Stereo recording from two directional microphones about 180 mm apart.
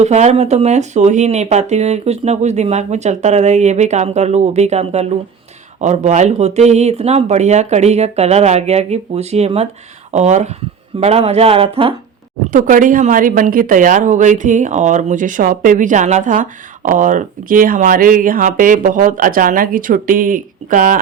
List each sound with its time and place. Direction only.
0.0 s speech: 40° right (ahead or behind)
12.5 s speech: 45° right (ahead or behind)